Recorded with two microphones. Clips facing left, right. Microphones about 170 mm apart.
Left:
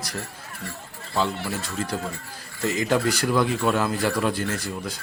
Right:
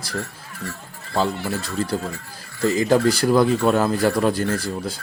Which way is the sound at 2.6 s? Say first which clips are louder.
Right 5 dB; 35° right (ahead or behind).